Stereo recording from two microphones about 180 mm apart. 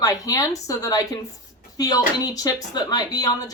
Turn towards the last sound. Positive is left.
turn(degrees=20)  # may be behind; listen again after turning